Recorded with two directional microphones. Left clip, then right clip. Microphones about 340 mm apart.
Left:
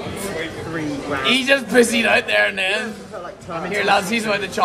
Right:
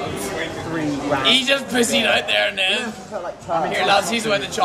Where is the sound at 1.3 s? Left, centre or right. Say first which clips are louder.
Left 2 dB; centre.